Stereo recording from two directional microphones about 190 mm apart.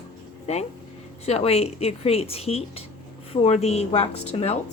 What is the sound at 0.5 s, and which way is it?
A woman's voice, 35° left (ahead or behind).